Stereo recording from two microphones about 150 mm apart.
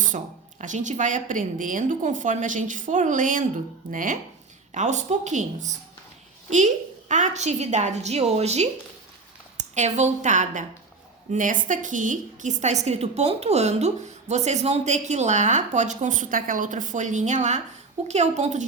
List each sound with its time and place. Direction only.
0.6 s a woman's voice: 55° right (ahead or behind)
4.7 s a woman's voice: 50° right (ahead or behind)
7.1 s a woman's voice: 50° right (ahead or behind)